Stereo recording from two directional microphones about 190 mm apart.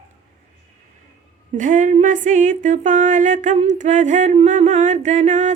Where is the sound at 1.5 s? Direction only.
40° right (ahead or behind).